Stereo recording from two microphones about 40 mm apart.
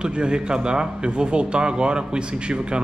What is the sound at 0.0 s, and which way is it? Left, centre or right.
Speech, right.